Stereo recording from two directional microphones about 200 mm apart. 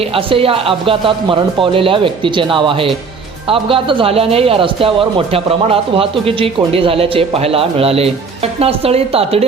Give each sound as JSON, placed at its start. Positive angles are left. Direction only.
{"t": 0.1, "sound": "a man's voice", "side_deg": -25}